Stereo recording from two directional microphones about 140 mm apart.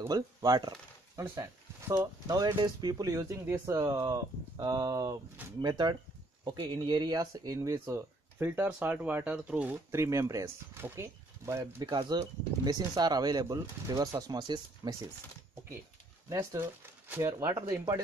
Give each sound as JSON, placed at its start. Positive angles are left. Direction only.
{"t": 0.0, "sound": "speech", "side_deg": -25}
{"t": 1.2, "sound": "speech", "side_deg": -20}
{"t": 11.6, "sound": "speech", "side_deg": -30}
{"t": 16.3, "sound": "speech", "side_deg": -20}